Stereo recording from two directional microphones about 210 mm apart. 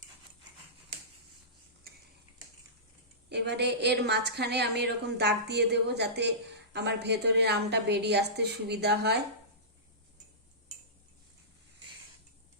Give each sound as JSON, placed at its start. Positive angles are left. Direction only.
{"t": 3.2, "sound": "a woman's voice", "side_deg": -55}